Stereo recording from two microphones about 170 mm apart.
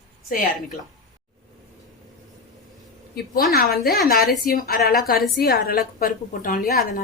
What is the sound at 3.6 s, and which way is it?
A woman's voice, 65° left (ahead or behind).